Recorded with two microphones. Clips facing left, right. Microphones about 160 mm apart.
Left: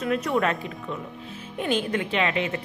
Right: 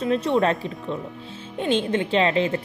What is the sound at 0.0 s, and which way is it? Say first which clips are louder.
Speech: right 3 dB; 30° right (ahead or behind).